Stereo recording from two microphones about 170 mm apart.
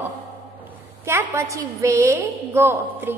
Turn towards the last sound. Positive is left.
turn(degrees=-15)  # may be behind; listen again after turning